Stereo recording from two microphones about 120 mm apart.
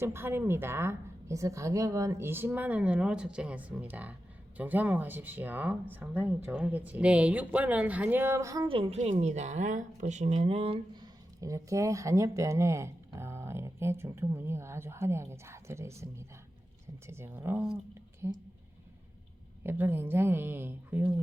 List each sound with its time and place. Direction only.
0.0 s a woman's voice: 20° right (ahead or behind)
8.6 s a woman's voice: 50° right (ahead or behind)
9.0 s speech: 70° right (ahead or behind); by 10.8 s 50° right (ahead or behind)
11.0 s a woman's voice: 30° right (ahead or behind)
19.6 s a woman's voice: 15° right (ahead or behind)